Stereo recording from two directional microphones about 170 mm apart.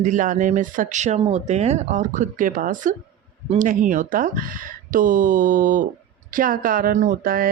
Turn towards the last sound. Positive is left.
turn(degrees=-60)  # may be behind; listen again after turning